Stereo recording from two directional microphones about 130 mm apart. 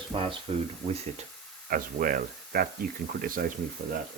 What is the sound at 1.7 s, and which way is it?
Speech, 90° right.